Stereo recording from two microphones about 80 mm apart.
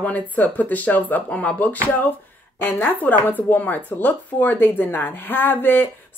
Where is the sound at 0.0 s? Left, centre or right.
Centre.